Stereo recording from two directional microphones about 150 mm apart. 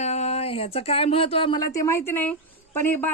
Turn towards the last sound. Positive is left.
turn(degrees=15)  # may be behind; listen again after turning